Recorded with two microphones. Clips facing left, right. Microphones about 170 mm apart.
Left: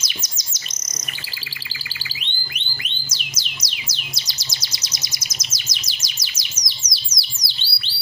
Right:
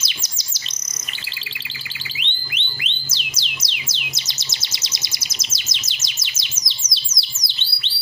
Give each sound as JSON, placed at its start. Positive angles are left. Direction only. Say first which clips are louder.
{"t": 0.0, "sound": "bird", "louder": "left 2 dB", "side_deg": -30}
{"t": 2.1, "sound": "music", "louder": "right 2 dB", "side_deg": -25}
{"t": 5.4, "sound": "bird", "louder": "right 1 dB", "side_deg": -25}